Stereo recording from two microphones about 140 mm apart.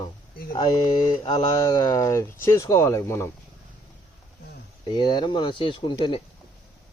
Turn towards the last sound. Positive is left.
turn(degrees=35)  # may be behind; listen again after turning